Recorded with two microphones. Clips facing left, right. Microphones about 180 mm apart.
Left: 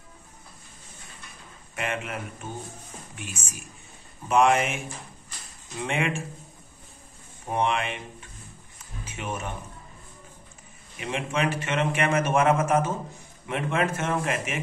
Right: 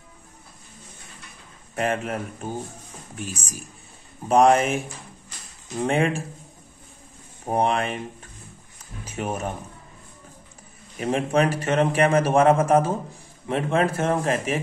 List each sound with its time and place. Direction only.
1.8 s a man's voice: 40° right (ahead or behind)
7.4 s a man's voice: 40° right (ahead or behind)
11.0 s a man's voice: 40° right (ahead or behind)